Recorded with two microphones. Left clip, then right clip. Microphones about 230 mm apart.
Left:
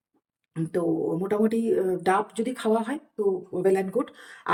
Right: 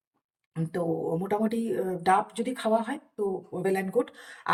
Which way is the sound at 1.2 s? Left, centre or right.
Centre.